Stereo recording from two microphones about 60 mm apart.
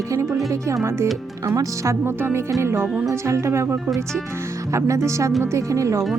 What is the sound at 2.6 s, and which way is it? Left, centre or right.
Speech, right.